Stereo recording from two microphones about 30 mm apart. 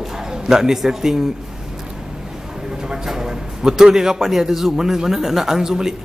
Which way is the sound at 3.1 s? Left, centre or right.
Centre.